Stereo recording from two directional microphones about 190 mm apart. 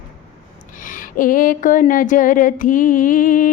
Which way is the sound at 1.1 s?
45° left (ahead or behind).